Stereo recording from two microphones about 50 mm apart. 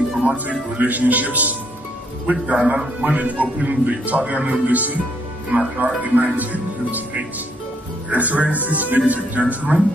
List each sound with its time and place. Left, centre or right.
0.2 s a man's voice: right